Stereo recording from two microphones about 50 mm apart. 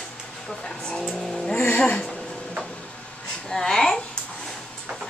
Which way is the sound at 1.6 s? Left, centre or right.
Left.